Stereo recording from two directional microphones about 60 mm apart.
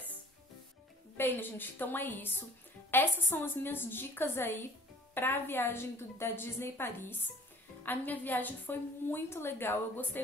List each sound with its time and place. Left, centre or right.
1.1 s a woman's voice: left